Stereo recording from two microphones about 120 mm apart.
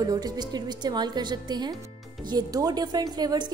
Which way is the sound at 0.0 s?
35° right (ahead or behind).